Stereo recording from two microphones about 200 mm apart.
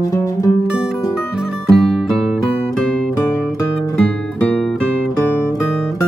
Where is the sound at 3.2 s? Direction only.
15° left (ahead or behind).